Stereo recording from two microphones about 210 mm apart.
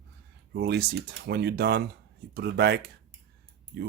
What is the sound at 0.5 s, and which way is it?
Speech, 50° right (ahead or behind).